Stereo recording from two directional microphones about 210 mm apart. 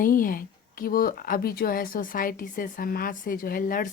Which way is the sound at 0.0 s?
45° left (ahead or behind).